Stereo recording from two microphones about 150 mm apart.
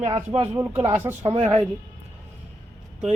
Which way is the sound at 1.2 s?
40° right (ahead or behind).